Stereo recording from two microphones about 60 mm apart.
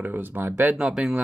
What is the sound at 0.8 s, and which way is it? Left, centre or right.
Speech, centre.